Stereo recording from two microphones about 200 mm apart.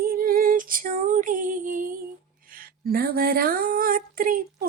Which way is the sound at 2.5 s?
45° right (ahead or behind).